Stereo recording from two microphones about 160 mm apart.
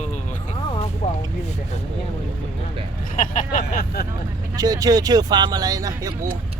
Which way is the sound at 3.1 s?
55° left (ahead or behind).